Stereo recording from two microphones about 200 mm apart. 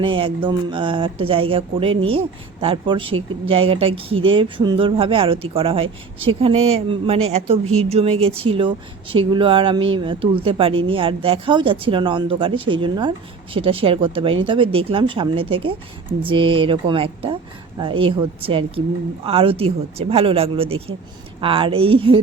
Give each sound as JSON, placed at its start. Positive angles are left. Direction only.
{"t": 0.0, "sound": "a woman's voice", "side_deg": -25}